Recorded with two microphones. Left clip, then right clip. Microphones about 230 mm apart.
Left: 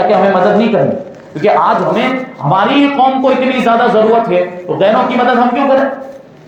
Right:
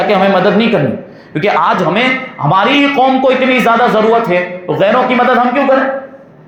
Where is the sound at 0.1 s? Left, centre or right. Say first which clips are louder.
Left 1 dB; right.